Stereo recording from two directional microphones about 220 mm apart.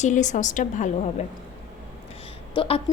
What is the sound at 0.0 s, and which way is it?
Speech, 35° left (ahead or behind).